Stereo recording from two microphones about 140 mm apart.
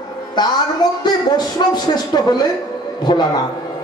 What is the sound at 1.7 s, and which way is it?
Speech, 30° left (ahead or behind).